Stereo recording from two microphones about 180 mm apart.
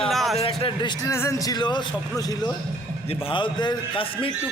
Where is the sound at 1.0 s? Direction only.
15° left (ahead or behind).